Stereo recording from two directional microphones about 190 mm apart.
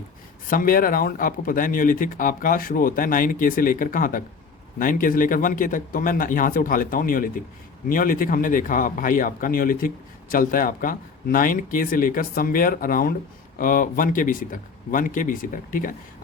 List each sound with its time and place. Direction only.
0.5 s speech: 50° left (ahead or behind)